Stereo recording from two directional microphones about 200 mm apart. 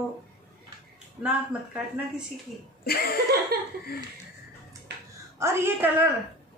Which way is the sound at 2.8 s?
50° left (ahead or behind).